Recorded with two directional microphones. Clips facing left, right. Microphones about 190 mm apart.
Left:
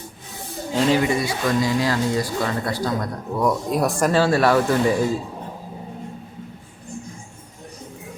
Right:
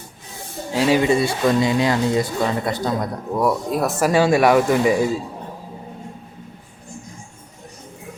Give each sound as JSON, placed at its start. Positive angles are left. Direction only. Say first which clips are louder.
{"t": 0.7, "sound": "speech", "louder": "right 1 dB", "side_deg": -5}
{"t": 1.0, "sound": "speech", "louder": "right 4 dB", "side_deg": -25}
{"t": 3.3, "sound": "speech", "louder": "right 1 dB", "side_deg": -5}
{"t": 4.0, "sound": "speech", "louder": "right 3 dB", "side_deg": -15}